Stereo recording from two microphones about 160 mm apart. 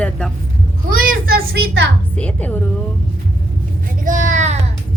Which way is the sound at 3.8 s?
55° right (ahead or behind).